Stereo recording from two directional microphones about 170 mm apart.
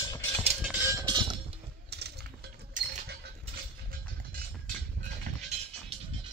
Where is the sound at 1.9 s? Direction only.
75° right (ahead or behind).